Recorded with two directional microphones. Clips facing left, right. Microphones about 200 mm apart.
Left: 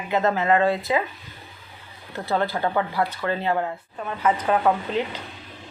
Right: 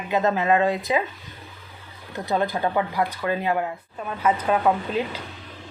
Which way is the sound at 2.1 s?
15° right (ahead or behind).